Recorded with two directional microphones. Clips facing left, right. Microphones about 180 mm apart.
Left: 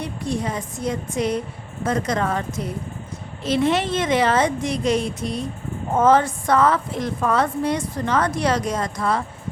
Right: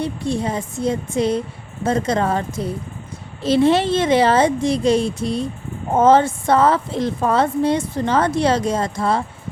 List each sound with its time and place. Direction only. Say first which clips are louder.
0.0 s a woman's voice: right 4 dB; 30° right (ahead or behind)